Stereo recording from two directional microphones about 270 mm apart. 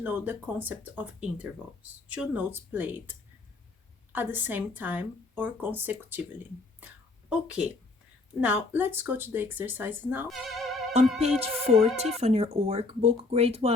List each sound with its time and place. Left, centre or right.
0.0 s speech: centre
11.2 s speech: right